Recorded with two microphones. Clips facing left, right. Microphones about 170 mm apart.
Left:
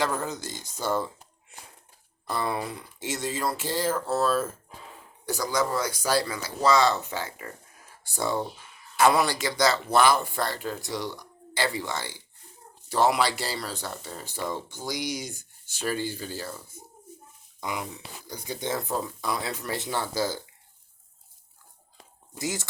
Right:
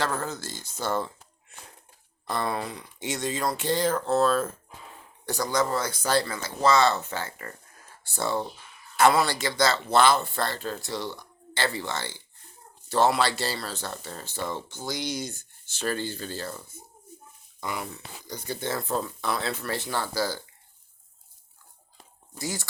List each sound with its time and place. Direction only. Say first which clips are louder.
0.0 s speech: left 1 dB; 15° left (ahead or behind)
2.3 s speech: even; 10° left (ahead or behind)
22.4 s speech: left 2 dB; 20° left (ahead or behind)